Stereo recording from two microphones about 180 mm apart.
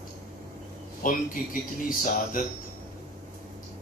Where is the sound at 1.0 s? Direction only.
50° left (ahead or behind).